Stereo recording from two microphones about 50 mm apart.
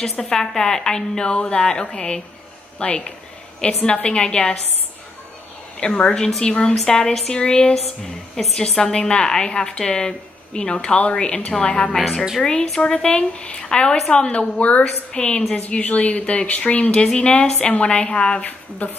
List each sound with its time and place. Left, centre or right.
0.2 s a woman's voice: centre
5.8 s a woman's voice: centre
6.7 s a woman's voice: centre
7.7 s a woman's voice: centre
18.8 s a woman's voice: left